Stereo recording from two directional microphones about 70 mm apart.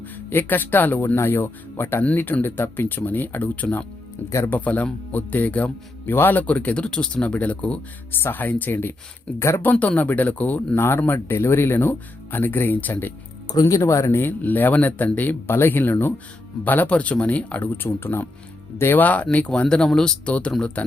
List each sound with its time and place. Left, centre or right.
0.3 s speech: left
6.1 s speech: left
10.8 s speech: left
13.7 s speech: left
14.2 s speech: left